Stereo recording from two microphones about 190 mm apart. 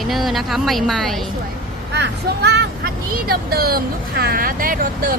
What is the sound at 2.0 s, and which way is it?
Speech, 65° right (ahead or behind).